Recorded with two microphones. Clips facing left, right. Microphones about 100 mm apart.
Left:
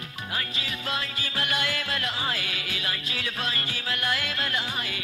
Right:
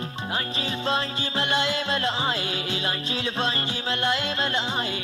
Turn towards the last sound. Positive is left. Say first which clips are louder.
# right 4 dB
turn(degrees=-30)  # may be behind; listen again after turning